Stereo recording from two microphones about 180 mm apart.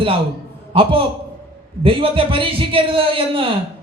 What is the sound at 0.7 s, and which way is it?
A man's voice, 30° right (ahead or behind).